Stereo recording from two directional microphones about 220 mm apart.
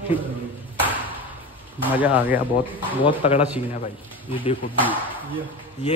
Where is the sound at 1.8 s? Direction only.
5° right (ahead or behind).